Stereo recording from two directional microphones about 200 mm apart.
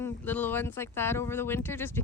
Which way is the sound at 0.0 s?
10° left (ahead or behind).